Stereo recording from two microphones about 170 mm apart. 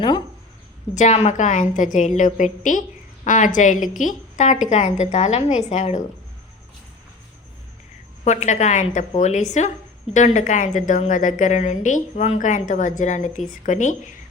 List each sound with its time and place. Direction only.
0.9 s a woman's voice: 45° left (ahead or behind)
8.2 s a woman's voice: 45° left (ahead or behind)